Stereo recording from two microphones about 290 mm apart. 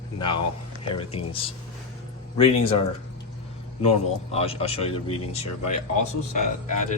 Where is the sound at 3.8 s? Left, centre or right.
Left.